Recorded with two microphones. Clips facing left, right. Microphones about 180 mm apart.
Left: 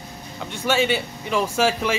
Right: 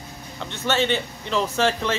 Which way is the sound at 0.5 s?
10° left (ahead or behind).